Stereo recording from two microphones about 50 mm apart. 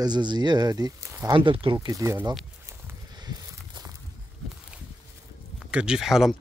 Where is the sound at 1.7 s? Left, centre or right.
Right.